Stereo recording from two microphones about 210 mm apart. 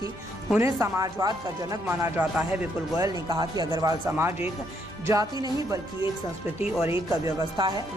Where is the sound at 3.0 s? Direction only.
15° right (ahead or behind).